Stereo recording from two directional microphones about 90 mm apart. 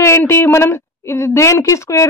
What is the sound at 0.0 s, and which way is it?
A woman's voice, 30° left (ahead or behind).